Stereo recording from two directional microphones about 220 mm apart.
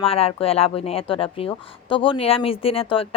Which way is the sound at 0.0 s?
25° left (ahead or behind).